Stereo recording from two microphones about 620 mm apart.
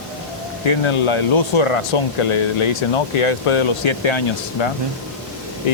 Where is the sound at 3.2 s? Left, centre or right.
Left.